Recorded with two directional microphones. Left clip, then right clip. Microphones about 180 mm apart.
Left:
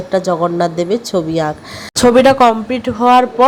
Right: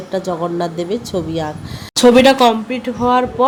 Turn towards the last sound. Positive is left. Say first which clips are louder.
# left 5 dB
turn(degrees=20)  # may be behind; listen again after turning